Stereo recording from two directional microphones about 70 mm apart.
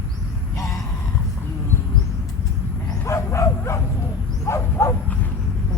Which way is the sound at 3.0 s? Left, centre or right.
Left.